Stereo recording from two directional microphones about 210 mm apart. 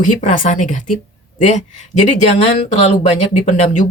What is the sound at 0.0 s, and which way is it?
Speech, 35° left (ahead or behind).